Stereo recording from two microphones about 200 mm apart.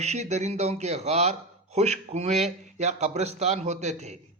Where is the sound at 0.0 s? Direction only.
35° right (ahead or behind).